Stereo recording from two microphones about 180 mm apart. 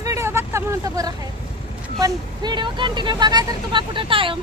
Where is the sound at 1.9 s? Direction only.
20° right (ahead or behind).